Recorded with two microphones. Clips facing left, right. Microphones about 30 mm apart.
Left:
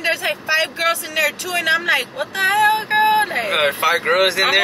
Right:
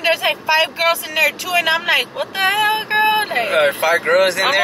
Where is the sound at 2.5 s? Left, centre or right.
Centre.